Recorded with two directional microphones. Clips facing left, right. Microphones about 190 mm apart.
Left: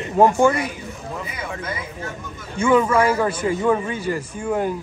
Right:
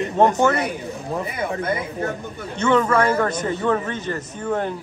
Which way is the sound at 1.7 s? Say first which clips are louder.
Right 6 dB; 60° right (ahead or behind).